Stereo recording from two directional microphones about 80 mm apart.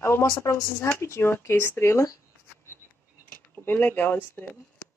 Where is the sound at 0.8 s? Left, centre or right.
Left.